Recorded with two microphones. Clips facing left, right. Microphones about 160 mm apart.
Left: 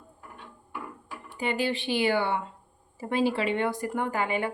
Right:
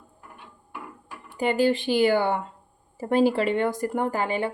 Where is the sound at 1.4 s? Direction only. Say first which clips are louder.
Right 7 dB; 45° right (ahead or behind).